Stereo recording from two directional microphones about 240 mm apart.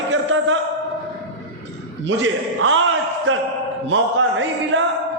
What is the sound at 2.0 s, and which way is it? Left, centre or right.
Speech, right.